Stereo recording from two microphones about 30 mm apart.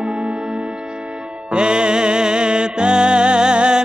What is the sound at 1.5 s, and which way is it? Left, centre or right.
Music, right.